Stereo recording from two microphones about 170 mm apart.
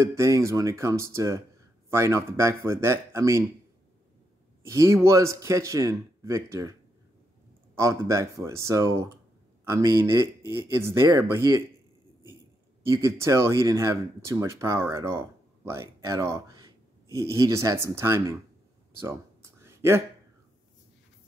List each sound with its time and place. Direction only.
0.0 s speech: 15° right (ahead or behind)
4.6 s speech: 15° right (ahead or behind)
7.7 s speech: 15° right (ahead or behind)
12.8 s speech: 15° right (ahead or behind)
19.6 s a sound: 15° right (ahead or behind)